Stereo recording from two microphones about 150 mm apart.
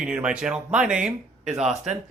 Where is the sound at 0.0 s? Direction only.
5° right (ahead or behind).